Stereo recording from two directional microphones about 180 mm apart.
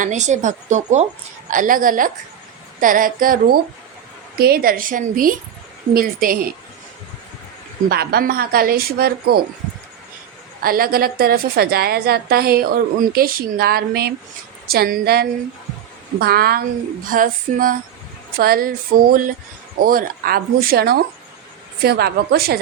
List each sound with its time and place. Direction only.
0.0 s a woman's voice: 40° right (ahead or behind)
7.9 s a woman's voice: 60° right (ahead or behind)
10.6 s a woman's voice: 55° right (ahead or behind)